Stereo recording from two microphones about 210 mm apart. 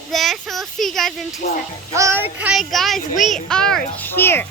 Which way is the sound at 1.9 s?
15° right (ahead or behind).